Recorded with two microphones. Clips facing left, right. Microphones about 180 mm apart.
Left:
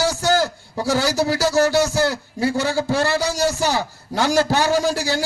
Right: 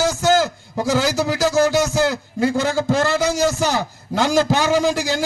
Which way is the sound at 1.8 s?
20° right (ahead or behind).